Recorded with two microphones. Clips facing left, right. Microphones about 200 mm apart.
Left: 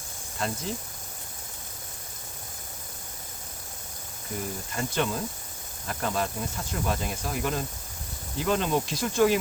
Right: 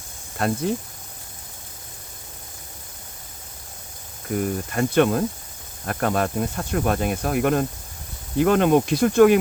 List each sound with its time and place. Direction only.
0.3 s speech: 60° right (ahead or behind)
4.7 s speech: 60° right (ahead or behind)